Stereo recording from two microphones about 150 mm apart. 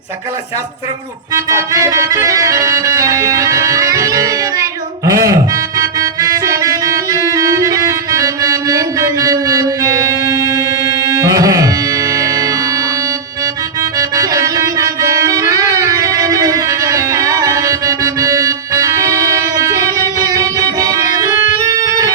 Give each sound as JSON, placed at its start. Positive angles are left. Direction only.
{"t": 1.3, "sound": "music", "side_deg": -20}
{"t": 14.0, "sound": "music", "side_deg": -20}